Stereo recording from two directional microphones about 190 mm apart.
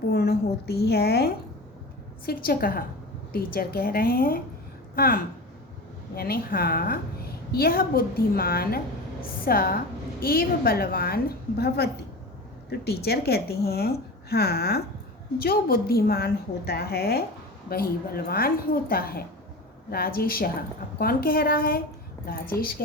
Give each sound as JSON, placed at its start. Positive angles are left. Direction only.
{"t": 0.1, "sound": "a woman's voice", "side_deg": 55}